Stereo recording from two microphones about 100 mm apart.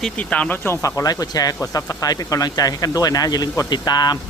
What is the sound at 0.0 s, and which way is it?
Speech, 10° left (ahead or behind).